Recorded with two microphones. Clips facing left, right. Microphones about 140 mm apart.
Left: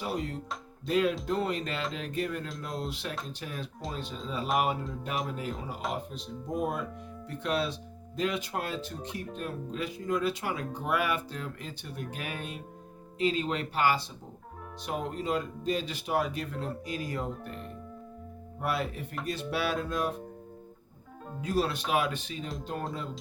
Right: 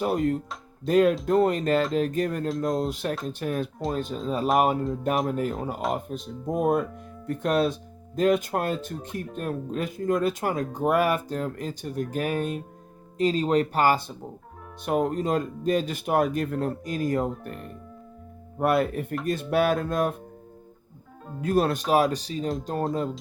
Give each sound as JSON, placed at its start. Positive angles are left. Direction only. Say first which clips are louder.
{"t": 0.0, "sound": "speech", "louder": "right 9 dB", "side_deg": -50}
{"t": 18.6, "sound": "speech", "louder": "right 9 dB", "side_deg": -55}
{"t": 21.4, "sound": "speech", "louder": "right 6 dB", "side_deg": -55}
{"t": 21.8, "sound": "speech", "louder": "right 7 dB", "side_deg": -40}